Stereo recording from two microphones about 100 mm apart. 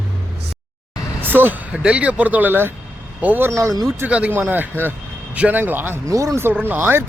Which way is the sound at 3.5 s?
35° right (ahead or behind).